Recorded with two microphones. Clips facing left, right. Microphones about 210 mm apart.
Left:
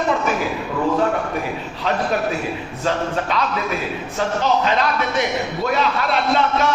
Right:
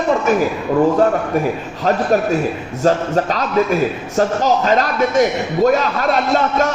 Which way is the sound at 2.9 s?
40° right (ahead or behind).